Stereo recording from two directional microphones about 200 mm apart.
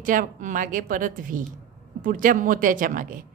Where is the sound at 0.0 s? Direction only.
40° right (ahead or behind).